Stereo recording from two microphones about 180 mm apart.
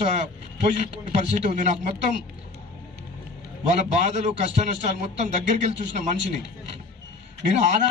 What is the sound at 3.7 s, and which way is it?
Speech, 40° right (ahead or behind).